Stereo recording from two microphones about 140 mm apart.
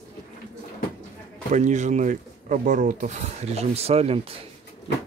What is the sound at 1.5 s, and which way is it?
Speech, 60° right (ahead or behind).